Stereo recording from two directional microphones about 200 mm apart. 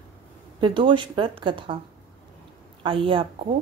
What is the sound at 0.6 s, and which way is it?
Speech, 25° right (ahead or behind).